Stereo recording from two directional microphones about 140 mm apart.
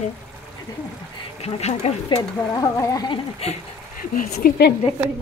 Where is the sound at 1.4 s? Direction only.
50° left (ahead or behind).